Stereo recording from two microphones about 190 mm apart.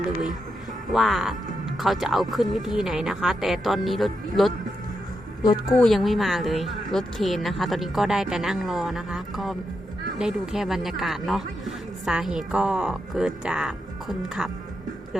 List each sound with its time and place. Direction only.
0.9 s speech: centre (ahead or behind)
5.4 s a woman's voice: 20° left (ahead or behind)
5.8 s speech: centre (ahead or behind)